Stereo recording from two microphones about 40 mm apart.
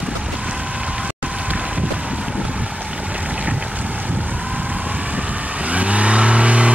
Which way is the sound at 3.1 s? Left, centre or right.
Right.